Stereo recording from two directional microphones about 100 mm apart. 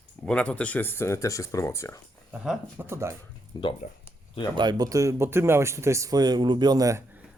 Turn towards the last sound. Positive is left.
turn(degrees=-40)  # may be behind; listen again after turning